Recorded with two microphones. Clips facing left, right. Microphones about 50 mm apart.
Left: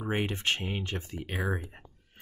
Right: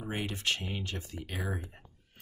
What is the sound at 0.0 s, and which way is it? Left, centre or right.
Speech, left.